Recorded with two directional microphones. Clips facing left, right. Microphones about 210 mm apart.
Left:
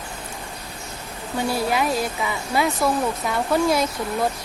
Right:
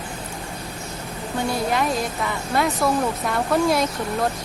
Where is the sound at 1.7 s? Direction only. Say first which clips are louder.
Even; 5° left (ahead or behind).